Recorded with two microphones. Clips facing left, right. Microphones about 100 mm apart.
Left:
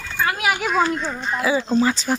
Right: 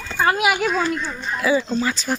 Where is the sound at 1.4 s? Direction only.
15° left (ahead or behind).